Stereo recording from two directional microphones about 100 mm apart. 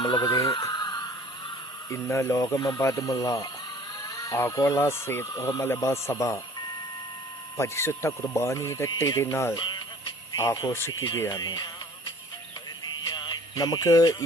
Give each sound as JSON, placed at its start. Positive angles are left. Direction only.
{"t": 0.0, "sound": "speech", "side_deg": 50}
{"t": 0.7, "sound": "a sound", "side_deg": 45}
{"t": 1.9, "sound": "speech", "side_deg": 30}
{"t": 2.6, "sound": "speech", "side_deg": 45}
{"t": 2.8, "sound": "speech", "side_deg": 35}
{"t": 4.0, "sound": "a sound", "side_deg": 30}
{"t": 4.6, "sound": "speech", "side_deg": 30}
{"t": 7.5, "sound": "speech", "side_deg": 25}
{"t": 9.6, "sound": "speech", "side_deg": 50}
{"t": 10.3, "sound": "speech", "side_deg": 35}
{"t": 11.3, "sound": "speech", "side_deg": 40}
{"t": 13.1, "sound": "music", "side_deg": 50}